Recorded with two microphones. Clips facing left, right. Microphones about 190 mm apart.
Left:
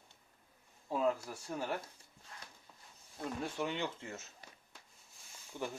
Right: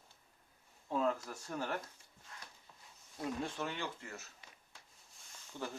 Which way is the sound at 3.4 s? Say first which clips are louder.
Left 3 dB; 15° left (ahead or behind).